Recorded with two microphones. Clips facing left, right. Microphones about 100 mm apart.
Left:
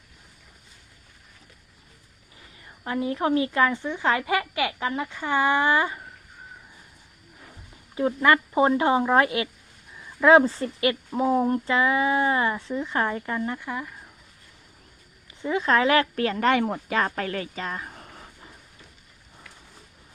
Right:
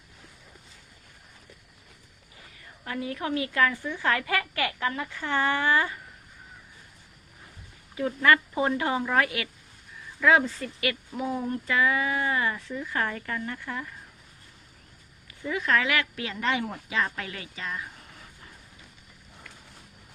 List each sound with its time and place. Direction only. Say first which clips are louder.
2.8 s a woman's voice: left 6 dB; 30° left (ahead or behind)
7.9 s a woman's voice: left 2 dB; 25° left (ahead or behind)
15.4 s speech: left 4 dB; 30° left (ahead or behind)